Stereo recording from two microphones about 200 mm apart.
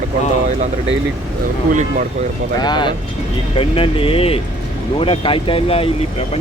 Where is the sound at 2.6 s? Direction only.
20° left (ahead or behind).